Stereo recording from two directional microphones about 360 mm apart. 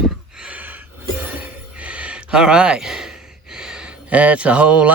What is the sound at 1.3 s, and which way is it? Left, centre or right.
Speech, centre.